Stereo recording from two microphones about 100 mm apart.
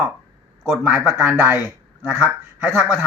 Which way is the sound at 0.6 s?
5° right (ahead or behind).